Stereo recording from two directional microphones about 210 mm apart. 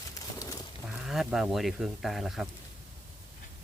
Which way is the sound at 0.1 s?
15° left (ahead or behind).